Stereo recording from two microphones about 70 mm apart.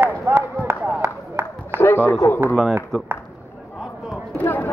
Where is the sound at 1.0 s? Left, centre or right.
Right.